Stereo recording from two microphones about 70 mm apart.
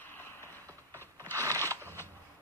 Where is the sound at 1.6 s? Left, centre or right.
Left.